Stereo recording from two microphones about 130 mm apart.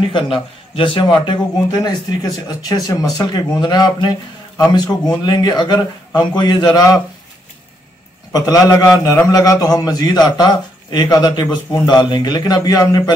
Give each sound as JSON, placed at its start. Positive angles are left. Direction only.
{"t": 0.1, "sound": "a man's voice", "side_deg": 40}
{"t": 8.3, "sound": "a man's voice", "side_deg": 30}